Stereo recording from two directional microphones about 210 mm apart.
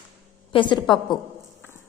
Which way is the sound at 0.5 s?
20° left (ahead or behind).